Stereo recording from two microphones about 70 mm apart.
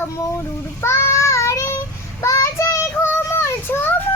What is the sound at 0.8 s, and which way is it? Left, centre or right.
Child singing, left.